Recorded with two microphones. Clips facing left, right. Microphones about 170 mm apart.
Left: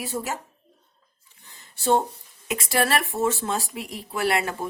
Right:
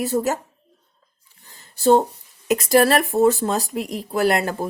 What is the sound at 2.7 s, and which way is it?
Speech, 40° right (ahead or behind).